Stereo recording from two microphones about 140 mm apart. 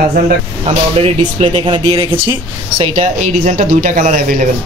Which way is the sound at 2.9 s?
60° right (ahead or behind).